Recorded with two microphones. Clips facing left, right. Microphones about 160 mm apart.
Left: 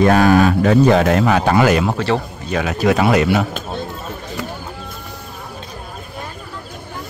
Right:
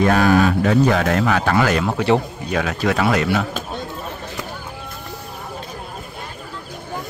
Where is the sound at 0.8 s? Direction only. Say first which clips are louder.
Left 4 dB; 25° left (ahead or behind); by 2.0 s 10° left (ahead or behind).